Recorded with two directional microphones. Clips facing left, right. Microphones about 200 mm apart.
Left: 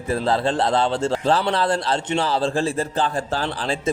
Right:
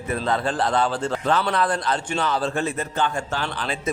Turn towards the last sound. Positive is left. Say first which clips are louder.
# left 3 dB
turn(degrees=30)  # may be behind; listen again after turning